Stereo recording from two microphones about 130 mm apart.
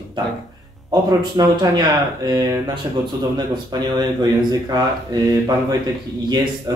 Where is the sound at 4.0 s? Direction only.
30° right (ahead or behind).